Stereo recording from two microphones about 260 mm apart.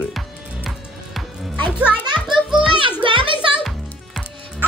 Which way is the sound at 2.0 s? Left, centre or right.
Centre.